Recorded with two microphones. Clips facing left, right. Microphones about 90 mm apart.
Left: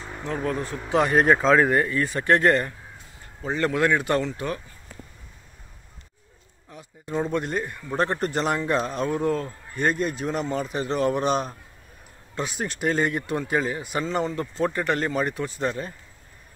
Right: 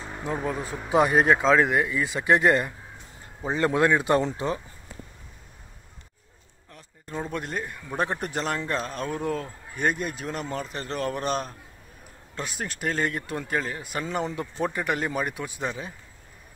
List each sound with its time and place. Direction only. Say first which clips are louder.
0.2 s speech: left 2 dB; 10° right (ahead or behind)
1.2 s a man's voice: left 2 dB; centre (ahead or behind); by 4.2 s 20° right (ahead or behind)
4.2 s speech: right 1 dB; 35° right (ahead or behind)
6.7 s speech: left 6 dB; 5° left (ahead or behind)